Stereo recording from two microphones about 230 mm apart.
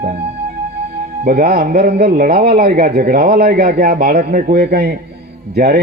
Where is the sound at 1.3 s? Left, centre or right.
Right.